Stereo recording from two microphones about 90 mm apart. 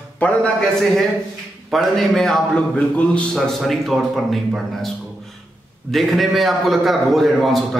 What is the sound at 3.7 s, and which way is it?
A man's voice, centre (ahead or behind).